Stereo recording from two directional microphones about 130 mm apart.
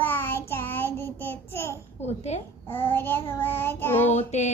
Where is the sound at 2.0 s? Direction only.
55° left (ahead or behind).